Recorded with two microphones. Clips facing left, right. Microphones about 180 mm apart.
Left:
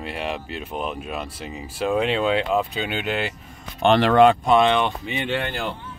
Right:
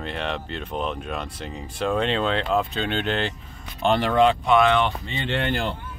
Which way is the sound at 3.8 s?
80° left.